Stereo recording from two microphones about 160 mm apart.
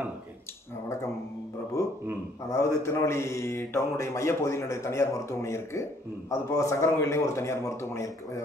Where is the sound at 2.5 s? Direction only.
20° left (ahead or behind).